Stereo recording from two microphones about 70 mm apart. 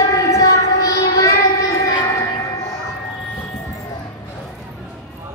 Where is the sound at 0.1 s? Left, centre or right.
Left.